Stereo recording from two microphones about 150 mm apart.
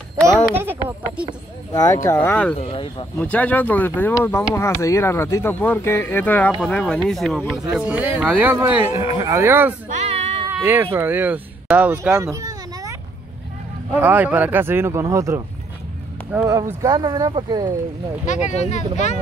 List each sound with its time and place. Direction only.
0.6 s a sound: 15° right (ahead or behind)
1.7 s speech: 25° left (ahead or behind)
2.5 s speech: 40° left (ahead or behind)
3.2 s speech: 10° left (ahead or behind)
7.7 s speech: 10° right (ahead or behind)
9.8 s child singing: 45° right (ahead or behind)
10.5 s speech: 15° right (ahead or behind)
12.2 s a sound: 20° right (ahead or behind)
13.9 s speech: 10° right (ahead or behind)
16.8 s speech: 25° right (ahead or behind)
18.2 s speech: 50° left (ahead or behind)